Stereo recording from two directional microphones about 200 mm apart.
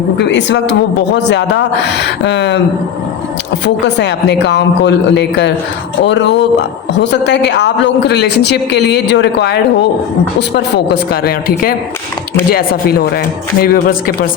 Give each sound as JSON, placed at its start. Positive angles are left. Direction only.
{"t": 0.2, "sound": "a woman's voice", "side_deg": 60}
{"t": 3.9, "sound": "a woman's voice", "side_deg": 60}
{"t": 11.1, "sound": "a man's voice", "side_deg": 50}